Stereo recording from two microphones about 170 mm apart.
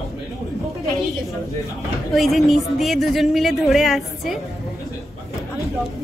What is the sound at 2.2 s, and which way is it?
A woman's voice, centre (ahead or behind).